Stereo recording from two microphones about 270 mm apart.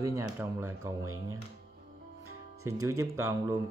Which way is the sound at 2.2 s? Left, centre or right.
Right.